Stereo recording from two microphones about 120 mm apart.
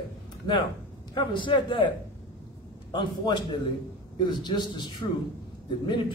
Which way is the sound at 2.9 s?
40° left (ahead or behind).